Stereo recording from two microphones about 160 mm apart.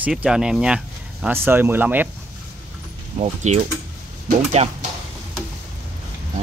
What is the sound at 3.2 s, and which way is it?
Speech, 45° right (ahead or behind).